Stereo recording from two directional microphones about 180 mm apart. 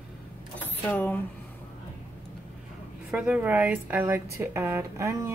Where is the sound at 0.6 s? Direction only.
10° left (ahead or behind).